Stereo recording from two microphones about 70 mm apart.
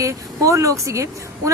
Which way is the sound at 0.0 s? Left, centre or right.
Right.